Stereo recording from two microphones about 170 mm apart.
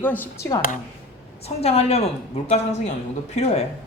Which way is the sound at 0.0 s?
10° left (ahead or behind).